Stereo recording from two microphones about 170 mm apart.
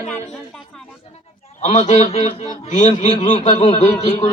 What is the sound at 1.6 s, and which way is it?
A man's voice, 45° left (ahead or behind).